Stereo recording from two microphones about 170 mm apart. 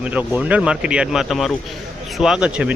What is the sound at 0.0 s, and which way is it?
Speech, 10° right (ahead or behind).